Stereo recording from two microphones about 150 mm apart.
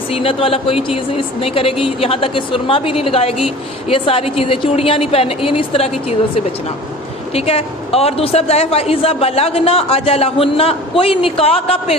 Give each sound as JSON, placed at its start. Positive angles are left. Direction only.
{"t": 0.1, "sound": "a woman's voice", "side_deg": 40}